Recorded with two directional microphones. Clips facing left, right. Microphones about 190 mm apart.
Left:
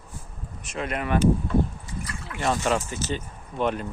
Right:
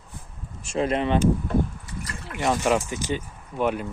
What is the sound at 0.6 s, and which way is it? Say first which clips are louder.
Speech: right 6 dB; 30° right (ahead or behind).